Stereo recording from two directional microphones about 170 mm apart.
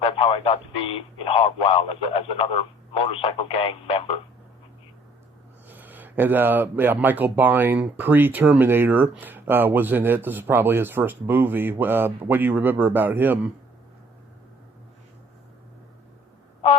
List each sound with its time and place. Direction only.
0.0 s speech: 35° left (ahead or behind)
5.6 s speech: 10° right (ahead or behind)